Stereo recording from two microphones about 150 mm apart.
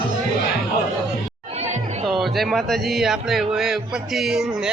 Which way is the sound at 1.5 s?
50° right (ahead or behind).